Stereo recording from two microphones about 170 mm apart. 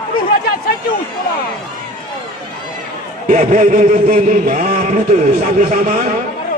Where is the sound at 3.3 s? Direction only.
45° right (ahead or behind).